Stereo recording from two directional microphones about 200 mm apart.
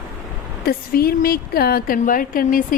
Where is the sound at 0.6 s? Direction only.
50° left (ahead or behind).